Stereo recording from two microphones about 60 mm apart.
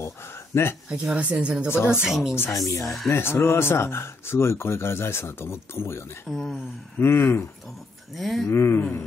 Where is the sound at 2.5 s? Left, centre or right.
Left.